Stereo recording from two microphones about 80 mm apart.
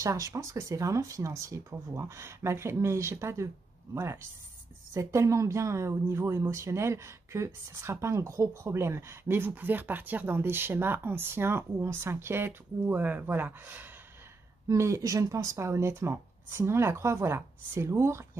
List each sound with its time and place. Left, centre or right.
0.0 s speech: right
14.7 s speech: right